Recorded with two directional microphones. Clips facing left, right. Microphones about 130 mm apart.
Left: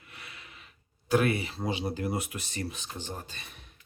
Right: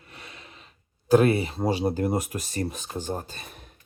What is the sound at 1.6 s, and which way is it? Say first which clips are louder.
Speech: right 7 dB; 45° right (ahead or behind).